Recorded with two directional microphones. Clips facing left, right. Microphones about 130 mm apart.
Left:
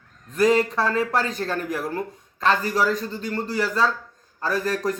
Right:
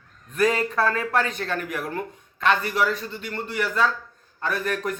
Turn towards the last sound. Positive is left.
turn(degrees=35)  # may be behind; listen again after turning